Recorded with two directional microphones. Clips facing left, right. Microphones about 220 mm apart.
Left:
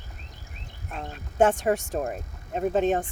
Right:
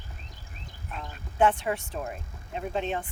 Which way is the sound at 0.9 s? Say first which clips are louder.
Left 4 dB; 45° left (ahead or behind).